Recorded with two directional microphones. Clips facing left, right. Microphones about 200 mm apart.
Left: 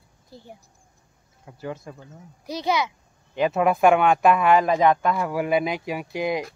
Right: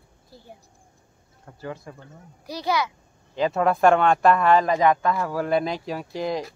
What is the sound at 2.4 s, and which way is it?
A child's voice, 20° left (ahead or behind).